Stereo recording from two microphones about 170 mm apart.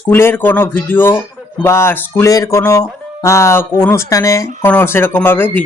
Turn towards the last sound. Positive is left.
turn(degrees=10)  # may be behind; listen again after turning